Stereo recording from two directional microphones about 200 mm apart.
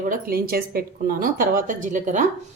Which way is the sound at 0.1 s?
45° right (ahead or behind).